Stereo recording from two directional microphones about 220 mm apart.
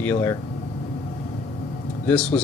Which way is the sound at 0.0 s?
10° left (ahead or behind).